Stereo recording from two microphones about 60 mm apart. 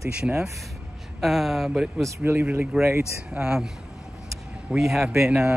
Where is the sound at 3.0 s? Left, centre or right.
Centre.